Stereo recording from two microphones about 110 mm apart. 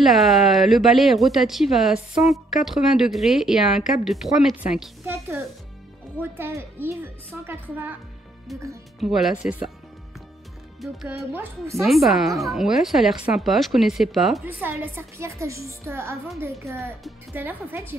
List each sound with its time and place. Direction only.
0.0 s speech: centre (ahead or behind)
5.0 s a woman's voice: 15° right (ahead or behind)
8.5 s speech: centre (ahead or behind)
11.3 s a woman's voice: 25° right (ahead or behind)
11.8 s speech: centre (ahead or behind)
14.4 s a woman's voice: 20° right (ahead or behind)